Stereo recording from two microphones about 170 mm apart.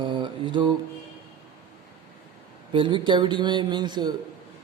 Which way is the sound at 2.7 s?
30° right (ahead or behind).